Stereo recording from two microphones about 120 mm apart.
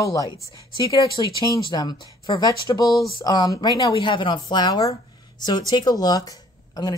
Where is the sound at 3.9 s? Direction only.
45° left (ahead or behind).